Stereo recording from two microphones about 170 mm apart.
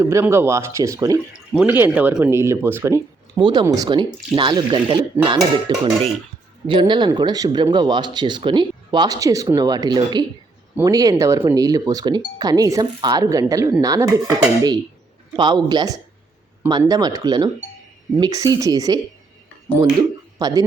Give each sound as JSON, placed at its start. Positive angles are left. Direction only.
{"t": 0.0, "sound": "speech", "side_deg": -15}
{"t": 3.3, "sound": "speech", "side_deg": -25}
{"t": 15.4, "sound": "speech", "side_deg": -25}
{"t": 20.4, "sound": "speech", "side_deg": -20}